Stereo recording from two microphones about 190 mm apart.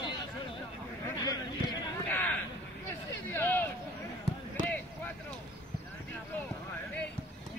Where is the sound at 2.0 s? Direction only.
10° left (ahead or behind).